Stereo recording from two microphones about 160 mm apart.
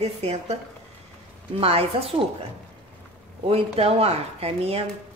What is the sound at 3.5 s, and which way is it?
Speech, 40° right (ahead or behind).